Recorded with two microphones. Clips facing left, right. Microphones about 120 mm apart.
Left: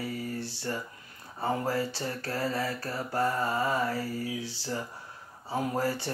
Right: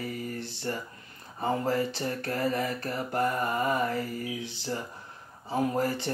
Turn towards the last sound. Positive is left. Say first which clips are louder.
# right 2 dB
turn(degrees=-20)  # may be behind; listen again after turning